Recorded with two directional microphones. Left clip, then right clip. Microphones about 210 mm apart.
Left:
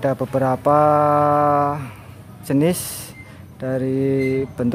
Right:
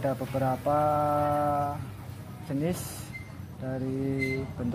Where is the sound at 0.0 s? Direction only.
30° left (ahead or behind).